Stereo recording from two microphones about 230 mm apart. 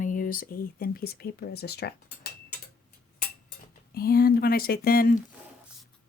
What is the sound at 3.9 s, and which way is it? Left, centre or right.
Speech, left.